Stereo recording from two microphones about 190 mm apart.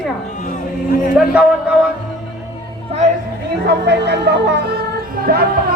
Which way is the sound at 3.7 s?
60° right (ahead or behind).